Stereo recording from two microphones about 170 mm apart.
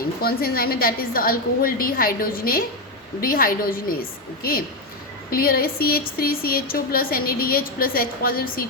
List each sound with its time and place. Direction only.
0.2 s speech: 60° left (ahead or behind)
5.3 s speech: 60° left (ahead or behind)